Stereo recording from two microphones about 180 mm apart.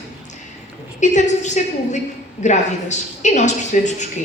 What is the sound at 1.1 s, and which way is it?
A woman's voice, 40° left (ahead or behind).